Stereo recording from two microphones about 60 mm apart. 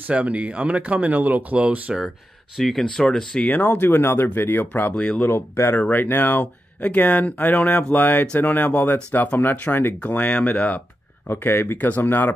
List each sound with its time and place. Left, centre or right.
0.1 s speech: right
2.0 s speech: centre
3.4 s speech: left
5.2 s speech: left
5.8 s speech: left
6.4 s speech: left
11.2 s speech: left